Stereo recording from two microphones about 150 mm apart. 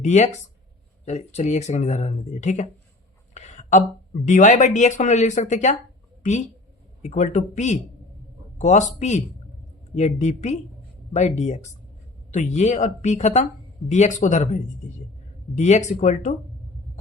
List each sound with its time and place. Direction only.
0.0 s speech: 50° left (ahead or behind)
3.3 s a sound: 50° left (ahead or behind)
4.3 s speech: 55° left (ahead or behind)
7.0 s speech: 55° left (ahead or behind)